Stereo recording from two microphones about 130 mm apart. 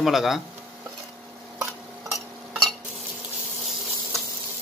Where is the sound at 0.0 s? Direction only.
Centre (ahead or behind).